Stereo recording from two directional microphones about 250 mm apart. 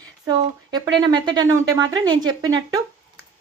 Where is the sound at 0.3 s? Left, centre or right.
Centre.